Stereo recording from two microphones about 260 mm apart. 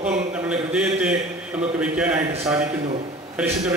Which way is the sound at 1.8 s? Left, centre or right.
Centre.